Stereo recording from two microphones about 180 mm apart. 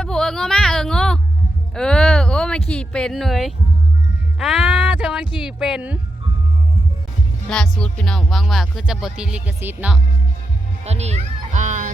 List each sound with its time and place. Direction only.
0.0 s a sound: 5° left (ahead or behind)
5.5 s speech: 5° right (ahead or behind)
7.5 s speech: 5° left (ahead or behind)
10.8 s children playing: 40° right (ahead or behind)